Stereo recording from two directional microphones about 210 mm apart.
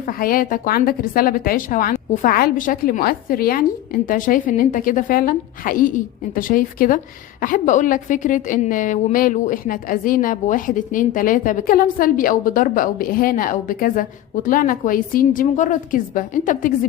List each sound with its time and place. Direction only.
0.0 s a woman's voice: 45° left (ahead or behind)